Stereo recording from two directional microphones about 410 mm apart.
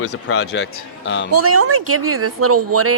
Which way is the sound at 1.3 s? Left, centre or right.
Right.